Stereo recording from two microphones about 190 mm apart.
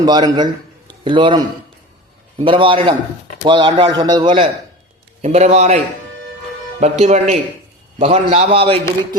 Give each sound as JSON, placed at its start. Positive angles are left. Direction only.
{"t": 0.0, "sound": "a man's voice", "side_deg": -20}
{"t": 5.2, "sound": "a man's voice", "side_deg": -35}
{"t": 7.0, "sound": "a man's voice", "side_deg": -35}